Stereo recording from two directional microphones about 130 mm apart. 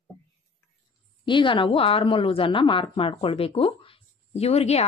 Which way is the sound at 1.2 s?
40° left (ahead or behind).